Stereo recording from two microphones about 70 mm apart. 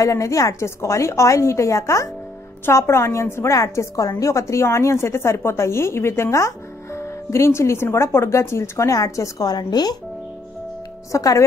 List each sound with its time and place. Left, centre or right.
0.0 s a woman's voice: left
9.5 s speech: left
11.1 s a woman's voice: left